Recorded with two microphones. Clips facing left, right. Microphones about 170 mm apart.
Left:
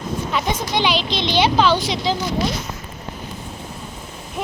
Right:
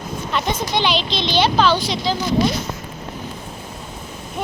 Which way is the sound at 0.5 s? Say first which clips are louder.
Right 1 dB; 10° left (ahead or behind).